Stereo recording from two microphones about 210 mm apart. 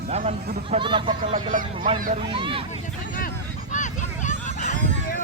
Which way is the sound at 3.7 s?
35° left (ahead or behind).